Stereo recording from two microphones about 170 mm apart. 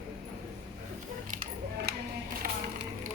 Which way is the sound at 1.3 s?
55° right (ahead or behind).